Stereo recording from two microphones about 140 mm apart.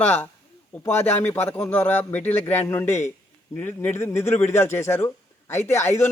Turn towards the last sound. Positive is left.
turn(degrees=20)  # may be behind; listen again after turning